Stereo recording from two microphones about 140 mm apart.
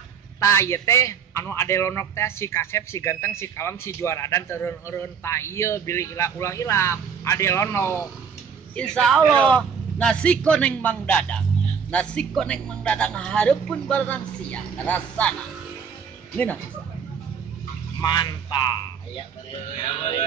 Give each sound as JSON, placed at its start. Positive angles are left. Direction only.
{"t": 0.4, "sound": "a man's voice", "side_deg": 20}
{"t": 8.7, "sound": "a man's voice", "side_deg": 5}
{"t": 18.0, "sound": "speech", "side_deg": 30}